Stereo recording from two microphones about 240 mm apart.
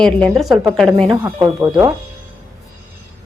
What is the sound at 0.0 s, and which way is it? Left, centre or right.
A woman's voice, centre.